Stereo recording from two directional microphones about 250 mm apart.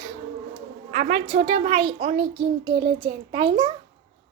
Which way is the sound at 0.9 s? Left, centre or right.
Right.